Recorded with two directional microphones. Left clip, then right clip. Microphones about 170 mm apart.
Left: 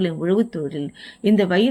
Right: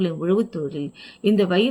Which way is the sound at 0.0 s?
30° left (ahead or behind).